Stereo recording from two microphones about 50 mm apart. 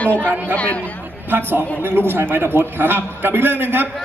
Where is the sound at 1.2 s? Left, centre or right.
Right.